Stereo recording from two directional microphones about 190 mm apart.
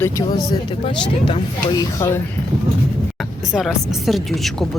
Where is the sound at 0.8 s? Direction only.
30° left (ahead or behind).